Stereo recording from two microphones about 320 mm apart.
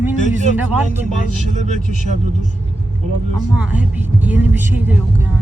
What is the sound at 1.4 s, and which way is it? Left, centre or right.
Speech, right.